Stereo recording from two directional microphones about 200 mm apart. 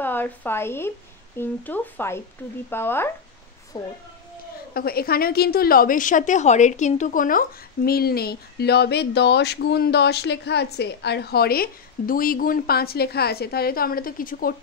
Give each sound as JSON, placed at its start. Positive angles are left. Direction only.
{"t": 0.0, "sound": "speech", "side_deg": 10}
{"t": 4.7, "sound": "a woman's voice", "side_deg": 50}